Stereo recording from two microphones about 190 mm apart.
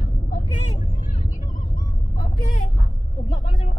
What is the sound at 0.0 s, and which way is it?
Vehicle, 40° left (ahead or behind).